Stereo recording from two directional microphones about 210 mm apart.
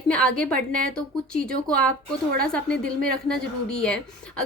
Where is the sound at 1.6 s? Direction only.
5° left (ahead or behind).